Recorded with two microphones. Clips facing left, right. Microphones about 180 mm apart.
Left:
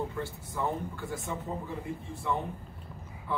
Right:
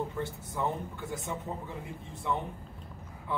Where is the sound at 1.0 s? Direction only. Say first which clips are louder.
Left 1 dB; 20° right (ahead or behind).